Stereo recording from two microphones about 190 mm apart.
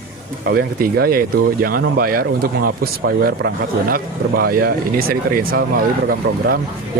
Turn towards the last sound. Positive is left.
turn(degrees=-55)  # may be behind; listen again after turning